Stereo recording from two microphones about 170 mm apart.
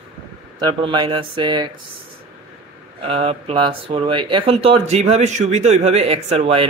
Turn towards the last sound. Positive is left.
turn(degrees=-35)  # may be behind; listen again after turning